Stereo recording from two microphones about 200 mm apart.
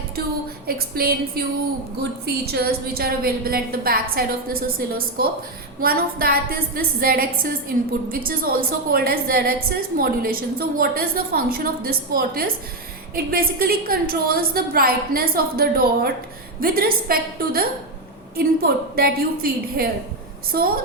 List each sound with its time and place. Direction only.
0.7 s a woman's voice: 50° right (ahead or behind)